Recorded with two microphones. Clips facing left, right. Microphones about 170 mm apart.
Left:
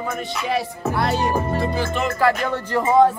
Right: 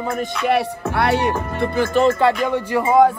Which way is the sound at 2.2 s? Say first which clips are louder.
Right 2 dB; 15° right (ahead or behind).